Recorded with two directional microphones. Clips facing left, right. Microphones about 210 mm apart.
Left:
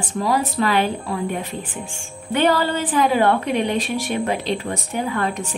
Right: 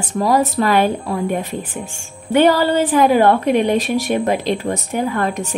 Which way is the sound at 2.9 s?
40° right (ahead or behind).